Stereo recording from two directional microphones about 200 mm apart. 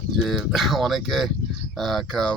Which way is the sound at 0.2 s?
Centre (ahead or behind).